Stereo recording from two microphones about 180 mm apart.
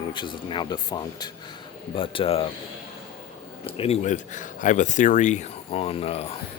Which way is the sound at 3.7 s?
30° left (ahead or behind).